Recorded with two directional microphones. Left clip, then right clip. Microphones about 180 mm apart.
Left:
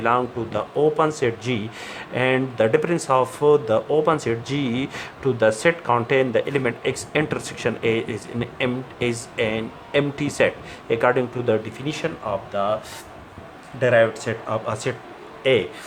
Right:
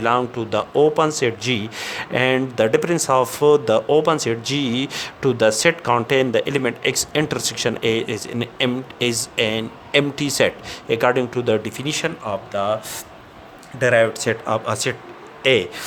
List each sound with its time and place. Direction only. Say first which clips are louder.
0.0 s speech: right 2 dB; 50° right (ahead or behind)
13.7 s speech: right 1 dB; 55° right (ahead or behind)